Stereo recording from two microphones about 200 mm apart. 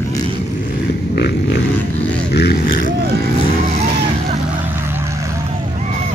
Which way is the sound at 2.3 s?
50° left (ahead or behind).